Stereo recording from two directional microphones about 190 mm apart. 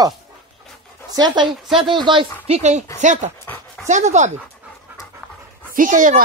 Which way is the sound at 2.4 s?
35° right (ahead or behind).